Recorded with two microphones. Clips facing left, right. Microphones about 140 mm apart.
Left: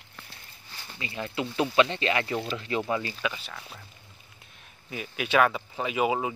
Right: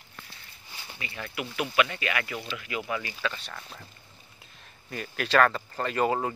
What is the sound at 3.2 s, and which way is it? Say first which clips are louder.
Speech: left 1 dB; 5° left (ahead or behind).